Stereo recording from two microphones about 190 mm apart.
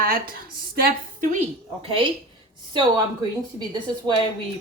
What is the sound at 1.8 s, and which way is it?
Speech, 30° right (ahead or behind).